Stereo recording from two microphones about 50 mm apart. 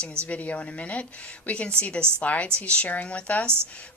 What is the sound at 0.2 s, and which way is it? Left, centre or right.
Speech, left.